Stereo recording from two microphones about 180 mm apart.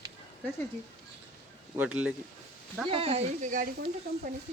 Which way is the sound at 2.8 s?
30° right (ahead or behind).